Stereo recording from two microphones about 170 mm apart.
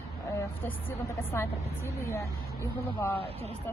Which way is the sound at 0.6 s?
15° left (ahead or behind).